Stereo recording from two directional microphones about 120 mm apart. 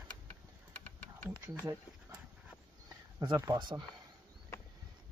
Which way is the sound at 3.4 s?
35° right (ahead or behind).